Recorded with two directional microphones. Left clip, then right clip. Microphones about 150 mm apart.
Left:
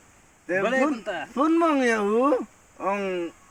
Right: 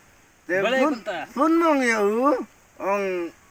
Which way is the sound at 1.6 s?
35° left (ahead or behind).